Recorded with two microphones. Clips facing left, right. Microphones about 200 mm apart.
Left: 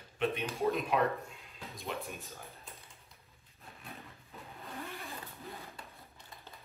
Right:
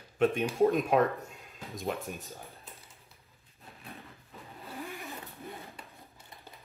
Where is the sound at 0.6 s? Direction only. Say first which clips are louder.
Right 6 dB; 50° right (ahead or behind).